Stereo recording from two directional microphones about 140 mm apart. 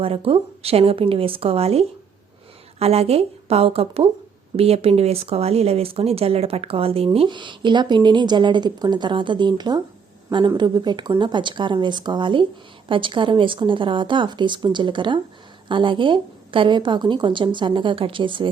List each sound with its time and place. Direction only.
0.0 s a woman's voice: 40° right (ahead or behind)